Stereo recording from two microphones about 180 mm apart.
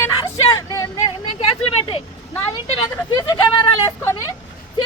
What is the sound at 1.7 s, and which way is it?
Speech, 30° left (ahead or behind).